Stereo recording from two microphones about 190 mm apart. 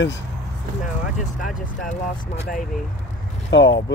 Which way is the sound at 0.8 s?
45° left (ahead or behind).